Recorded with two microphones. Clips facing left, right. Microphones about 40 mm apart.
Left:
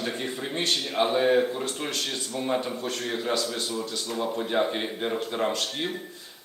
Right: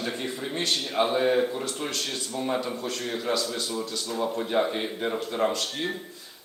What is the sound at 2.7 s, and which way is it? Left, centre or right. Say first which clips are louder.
Speech: left 1 dB; left.